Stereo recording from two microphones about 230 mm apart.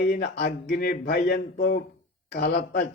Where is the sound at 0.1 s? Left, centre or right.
Left.